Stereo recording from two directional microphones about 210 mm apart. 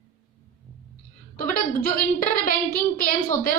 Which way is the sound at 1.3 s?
40° left (ahead or behind).